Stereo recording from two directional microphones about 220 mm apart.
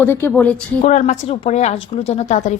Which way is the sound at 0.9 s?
30° left (ahead or behind).